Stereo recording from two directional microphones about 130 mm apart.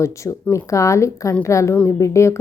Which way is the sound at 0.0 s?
25° left (ahead or behind).